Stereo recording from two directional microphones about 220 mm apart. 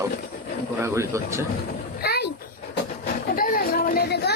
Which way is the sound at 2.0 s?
45° left (ahead or behind).